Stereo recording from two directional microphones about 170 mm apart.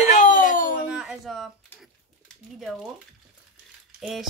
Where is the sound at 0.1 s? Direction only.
50° left (ahead or behind).